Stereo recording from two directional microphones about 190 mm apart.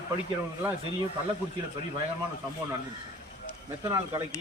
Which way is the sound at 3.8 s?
15° right (ahead or behind).